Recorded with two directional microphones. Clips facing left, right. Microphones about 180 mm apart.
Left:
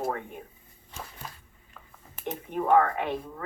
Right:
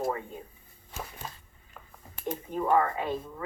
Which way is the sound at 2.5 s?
70° left (ahead or behind).